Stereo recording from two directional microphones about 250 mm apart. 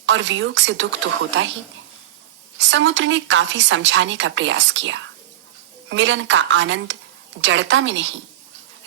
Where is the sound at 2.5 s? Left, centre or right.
Right.